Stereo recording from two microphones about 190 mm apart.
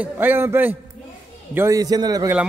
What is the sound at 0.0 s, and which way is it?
A man's voice, 10° right (ahead or behind).